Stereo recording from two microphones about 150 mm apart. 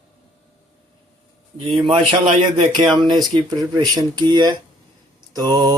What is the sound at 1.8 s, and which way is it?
Speech, 35° right (ahead or behind).